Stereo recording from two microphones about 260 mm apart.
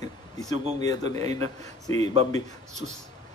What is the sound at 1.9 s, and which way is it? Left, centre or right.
Speech, right.